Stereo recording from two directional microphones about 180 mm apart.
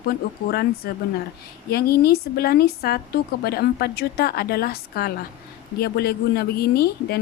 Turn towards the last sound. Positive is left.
turn(degrees=60)  # may be behind; listen again after turning